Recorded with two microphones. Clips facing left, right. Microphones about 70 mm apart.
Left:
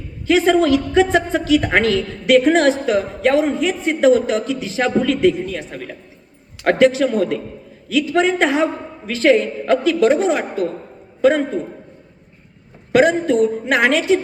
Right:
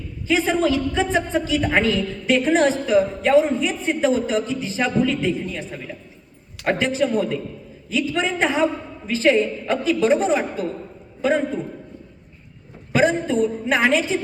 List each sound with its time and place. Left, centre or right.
0.3 s a woman's voice: left
1.1 s a woman's voice: left
5.4 s a man's voice: left
6.7 s a woman's voice: left
7.9 s a man's voice: left
12.9 s a woman's voice: left